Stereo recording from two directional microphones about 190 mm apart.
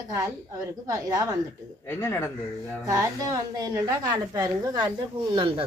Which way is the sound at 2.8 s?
20° right (ahead or behind).